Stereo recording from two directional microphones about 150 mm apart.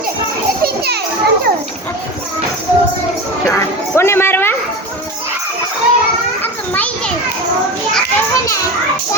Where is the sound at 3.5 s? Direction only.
15° left (ahead or behind).